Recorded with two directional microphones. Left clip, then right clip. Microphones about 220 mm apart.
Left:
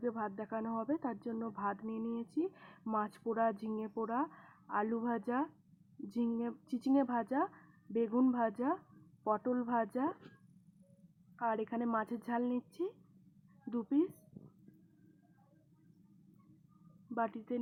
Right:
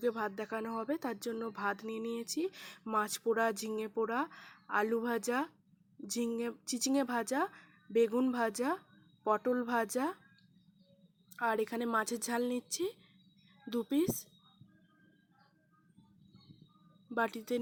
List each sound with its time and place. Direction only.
0.0 s speech: 25° right (ahead or behind)
11.3 s speech: 25° right (ahead or behind)
17.2 s speech: 30° right (ahead or behind)